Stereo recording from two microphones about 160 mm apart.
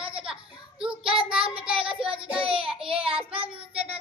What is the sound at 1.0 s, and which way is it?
Child singing, 35° right (ahead or behind).